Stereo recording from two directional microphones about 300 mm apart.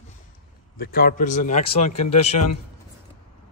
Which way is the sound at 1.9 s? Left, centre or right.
Left.